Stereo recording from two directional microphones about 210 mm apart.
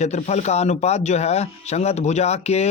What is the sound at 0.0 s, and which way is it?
Speech, 30° left (ahead or behind).